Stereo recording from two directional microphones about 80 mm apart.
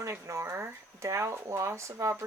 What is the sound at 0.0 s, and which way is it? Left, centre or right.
Speech, right.